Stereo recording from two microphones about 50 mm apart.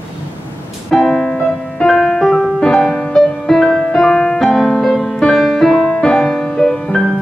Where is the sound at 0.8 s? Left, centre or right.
Centre.